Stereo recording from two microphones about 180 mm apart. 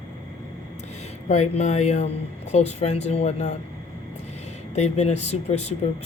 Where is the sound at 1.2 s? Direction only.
40° left (ahead or behind).